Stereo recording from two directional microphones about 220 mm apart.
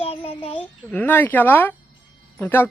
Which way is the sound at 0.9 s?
10° left (ahead or behind).